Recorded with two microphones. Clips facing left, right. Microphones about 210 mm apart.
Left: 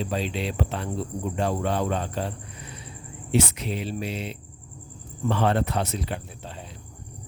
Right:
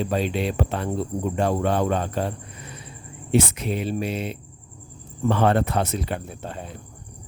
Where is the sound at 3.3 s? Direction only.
50° right (ahead or behind).